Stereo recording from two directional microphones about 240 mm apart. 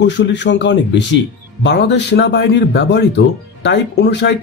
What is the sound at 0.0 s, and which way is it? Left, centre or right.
A man's voice, left.